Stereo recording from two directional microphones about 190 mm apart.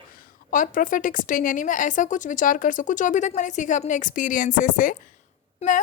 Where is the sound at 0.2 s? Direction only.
45° left (ahead or behind).